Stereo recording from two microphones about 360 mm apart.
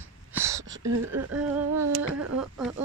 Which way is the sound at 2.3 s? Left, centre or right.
Centre.